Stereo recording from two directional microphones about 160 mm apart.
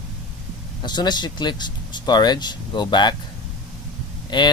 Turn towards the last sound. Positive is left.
turn(degrees=30)  # may be behind; listen again after turning